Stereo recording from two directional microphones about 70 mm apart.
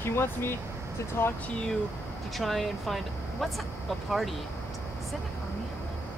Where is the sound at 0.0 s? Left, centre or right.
Left.